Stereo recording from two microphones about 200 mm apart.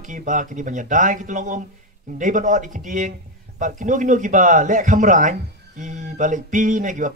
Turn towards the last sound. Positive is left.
turn(degrees=-40)  # may be behind; listen again after turning